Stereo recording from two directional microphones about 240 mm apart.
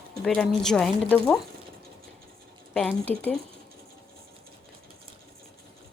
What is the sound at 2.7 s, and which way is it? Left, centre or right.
Speech, centre.